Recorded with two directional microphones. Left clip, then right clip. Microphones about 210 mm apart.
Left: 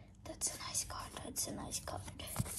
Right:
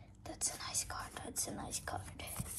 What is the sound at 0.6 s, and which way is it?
Speech, 25° left (ahead or behind).